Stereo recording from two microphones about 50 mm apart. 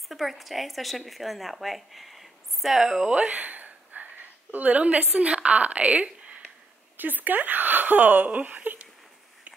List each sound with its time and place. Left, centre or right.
0.1 s a woman's voice: centre
3.3 s a sound: right
5.2 s speech: right
7.0 s speech: right